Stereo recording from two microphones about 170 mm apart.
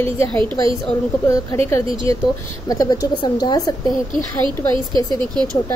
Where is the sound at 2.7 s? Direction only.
20° left (ahead or behind).